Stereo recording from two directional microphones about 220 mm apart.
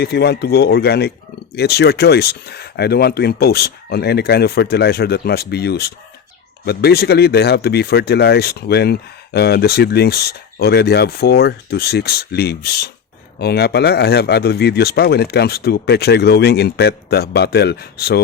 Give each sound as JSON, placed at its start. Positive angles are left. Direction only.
{"t": 0.0, "sound": "speech", "side_deg": 45}